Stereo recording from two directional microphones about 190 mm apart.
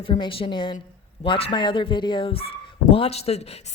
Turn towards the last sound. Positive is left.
turn(degrees=35)  # may be behind; listen again after turning